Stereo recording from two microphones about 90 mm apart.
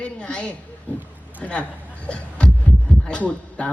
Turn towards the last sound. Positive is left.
turn(degrees=10)  # may be behind; listen again after turning